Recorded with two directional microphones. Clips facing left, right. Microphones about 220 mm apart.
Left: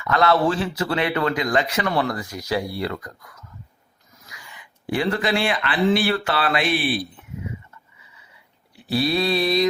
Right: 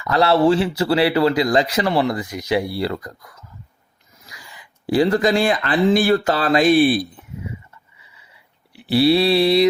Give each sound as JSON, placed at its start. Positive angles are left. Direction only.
{"t": 0.0, "sound": "speech", "side_deg": -30}
{"t": 4.3, "sound": "speech", "side_deg": -35}
{"t": 8.7, "sound": "a sound", "side_deg": -30}